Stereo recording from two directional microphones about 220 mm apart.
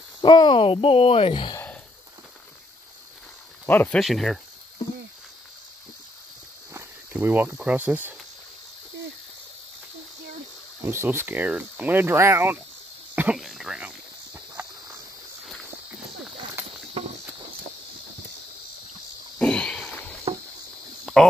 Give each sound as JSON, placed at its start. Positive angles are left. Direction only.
{"t": 0.2, "sound": "speech", "side_deg": 20}
{"t": 3.6, "sound": "speech", "side_deg": 10}
{"t": 6.7, "sound": "speech", "side_deg": -10}
{"t": 10.8, "sound": "speech", "side_deg": -10}
{"t": 13.1, "sound": "a sound", "side_deg": -5}
{"t": 19.3, "sound": "a sound", "side_deg": 5}
{"t": 21.0, "sound": "cricket", "side_deg": 0}